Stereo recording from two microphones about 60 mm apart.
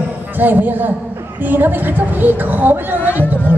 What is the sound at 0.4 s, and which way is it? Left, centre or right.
A man's voice, right.